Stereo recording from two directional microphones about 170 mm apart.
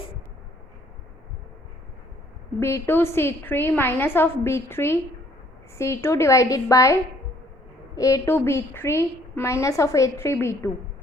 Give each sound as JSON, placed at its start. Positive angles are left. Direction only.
{"t": 2.6, "sound": "a woman's voice", "side_deg": 15}
{"t": 7.9, "sound": "a woman's voice", "side_deg": 20}